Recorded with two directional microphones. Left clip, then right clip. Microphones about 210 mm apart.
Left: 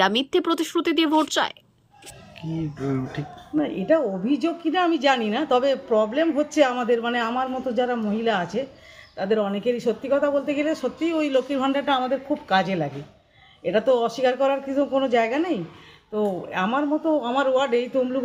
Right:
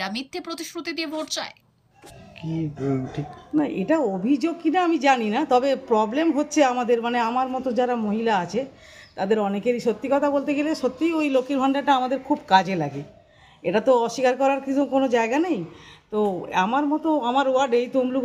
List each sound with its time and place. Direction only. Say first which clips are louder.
0.3 s speech: left 10 dB; 20° left (ahead or behind)
2.4 s a woman's voice: right 1 dB; centre (ahead or behind)